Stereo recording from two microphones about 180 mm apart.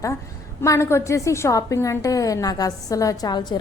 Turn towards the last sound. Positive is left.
turn(degrees=25)  # may be behind; listen again after turning